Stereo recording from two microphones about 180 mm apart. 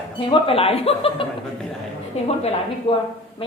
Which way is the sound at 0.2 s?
30° left (ahead or behind).